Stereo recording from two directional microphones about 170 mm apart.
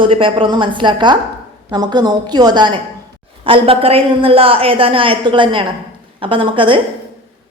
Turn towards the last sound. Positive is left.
turn(degrees=-30)  # may be behind; listen again after turning